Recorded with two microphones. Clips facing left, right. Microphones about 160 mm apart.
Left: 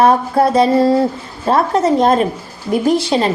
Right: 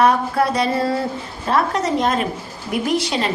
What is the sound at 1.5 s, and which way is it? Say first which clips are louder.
A woman's voice: left 6 dB; 30° left (ahead or behind).